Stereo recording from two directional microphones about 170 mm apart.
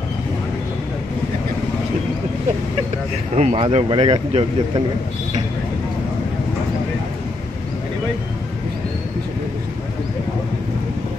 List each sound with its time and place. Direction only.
3.3 s speech: 40° right (ahead or behind)